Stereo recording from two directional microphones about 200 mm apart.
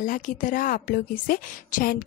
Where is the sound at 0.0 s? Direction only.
40° left (ahead or behind).